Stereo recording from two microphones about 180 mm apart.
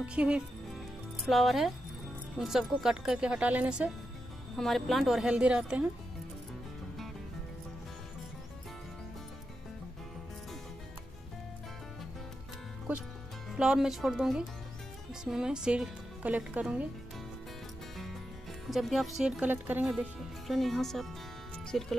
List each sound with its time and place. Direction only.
0.0 s speech: 5° right (ahead or behind)
13.6 s speech: 5° right (ahead or behind)
18.7 s speech: centre (ahead or behind)